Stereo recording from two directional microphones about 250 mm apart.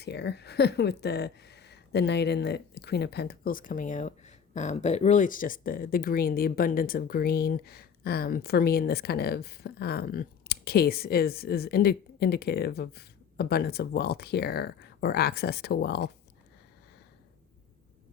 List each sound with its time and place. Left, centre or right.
0.0 s speech: left